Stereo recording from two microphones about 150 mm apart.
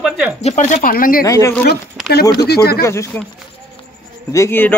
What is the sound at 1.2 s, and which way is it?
Speech, 20° left (ahead or behind).